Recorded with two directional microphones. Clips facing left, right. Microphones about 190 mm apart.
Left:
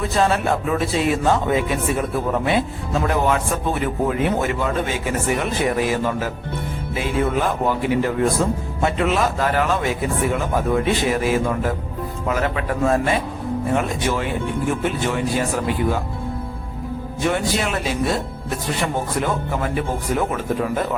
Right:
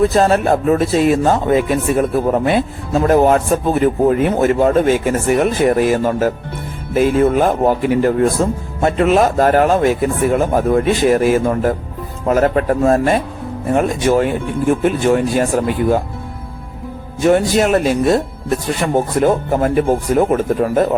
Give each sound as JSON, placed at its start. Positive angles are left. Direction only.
{"t": 0.1, "sound": "speech", "side_deg": -40}
{"t": 17.2, "sound": "speech", "side_deg": -45}